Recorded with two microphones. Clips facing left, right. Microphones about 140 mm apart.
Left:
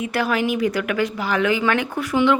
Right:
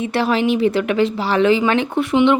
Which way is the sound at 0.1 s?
25° right (ahead or behind).